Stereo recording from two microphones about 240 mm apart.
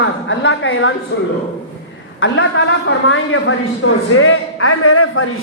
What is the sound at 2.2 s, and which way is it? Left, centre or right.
A woman's voice, left.